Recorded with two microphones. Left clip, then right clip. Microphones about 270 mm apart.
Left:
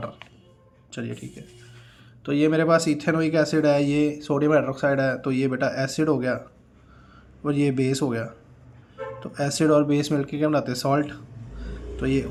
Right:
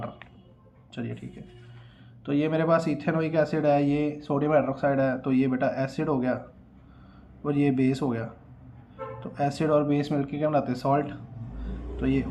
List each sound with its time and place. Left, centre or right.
0.9 s speech: left
2.2 s speech: left
7.4 s speech: left
11.6 s vehicle: left